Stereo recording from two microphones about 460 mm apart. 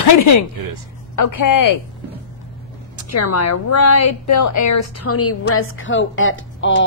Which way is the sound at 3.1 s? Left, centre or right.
Left.